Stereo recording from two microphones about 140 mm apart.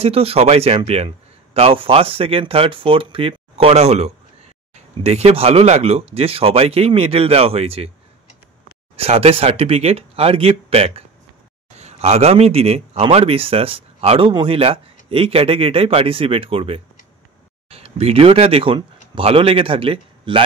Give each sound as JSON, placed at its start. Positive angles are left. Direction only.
{"t": 0.0, "sound": "a man's voice", "side_deg": -45}
{"t": 8.9, "sound": "a man's voice", "side_deg": -45}